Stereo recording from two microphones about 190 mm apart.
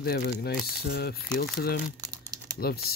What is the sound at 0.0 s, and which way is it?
Speech, 55° left (ahead or behind).